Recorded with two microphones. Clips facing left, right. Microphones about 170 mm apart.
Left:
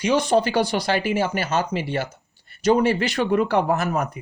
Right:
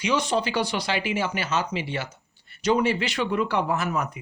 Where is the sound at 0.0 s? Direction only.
50° left (ahead or behind).